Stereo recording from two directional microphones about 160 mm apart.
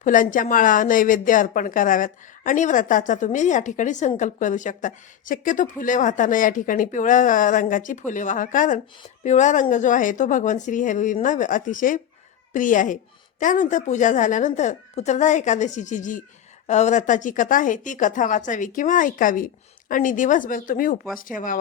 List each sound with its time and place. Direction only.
0.0 s a woman's voice: 55° left (ahead or behind)